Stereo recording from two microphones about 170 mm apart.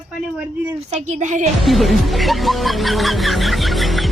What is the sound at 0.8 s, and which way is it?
Speech, 40° right (ahead or behind).